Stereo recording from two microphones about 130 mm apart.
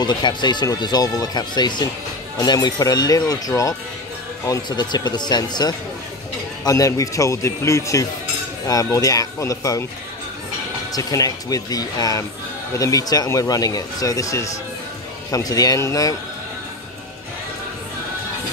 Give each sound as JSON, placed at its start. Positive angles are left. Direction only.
{"t": 0.0, "sound": "speech", "side_deg": 35}
{"t": 10.9, "sound": "speech", "side_deg": 30}